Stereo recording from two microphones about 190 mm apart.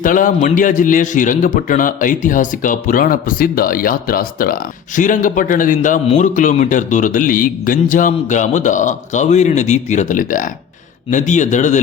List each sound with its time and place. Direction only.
0.0 s a man's voice: 45° left (ahead or behind)